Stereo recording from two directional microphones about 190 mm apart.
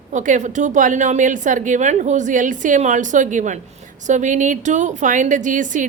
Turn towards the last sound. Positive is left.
turn(degrees=-40)  # may be behind; listen again after turning